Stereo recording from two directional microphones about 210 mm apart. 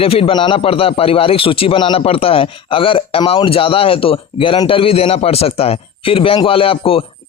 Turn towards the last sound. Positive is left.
turn(degrees=25)  # may be behind; listen again after turning